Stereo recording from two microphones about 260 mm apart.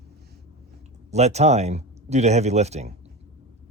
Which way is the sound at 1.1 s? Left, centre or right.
Right.